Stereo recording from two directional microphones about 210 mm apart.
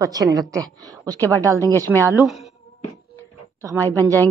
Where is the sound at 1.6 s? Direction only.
10° left (ahead or behind).